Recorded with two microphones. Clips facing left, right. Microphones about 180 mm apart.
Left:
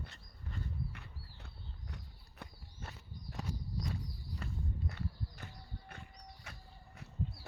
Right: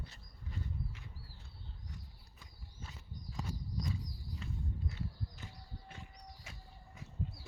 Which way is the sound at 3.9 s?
65° left (ahead or behind).